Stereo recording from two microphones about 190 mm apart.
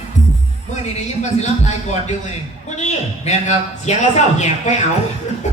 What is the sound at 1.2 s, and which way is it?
A man's voice, 35° left (ahead or behind).